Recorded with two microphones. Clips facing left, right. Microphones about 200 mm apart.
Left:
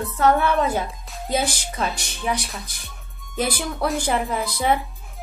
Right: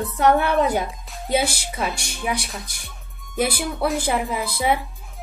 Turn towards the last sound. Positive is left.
turn(degrees=-5)  # may be behind; listen again after turning